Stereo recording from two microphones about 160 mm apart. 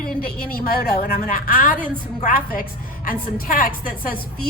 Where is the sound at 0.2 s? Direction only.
70° left (ahead or behind).